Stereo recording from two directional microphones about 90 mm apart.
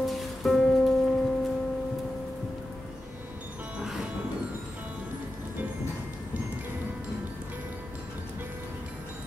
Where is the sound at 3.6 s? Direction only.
15° right (ahead or behind).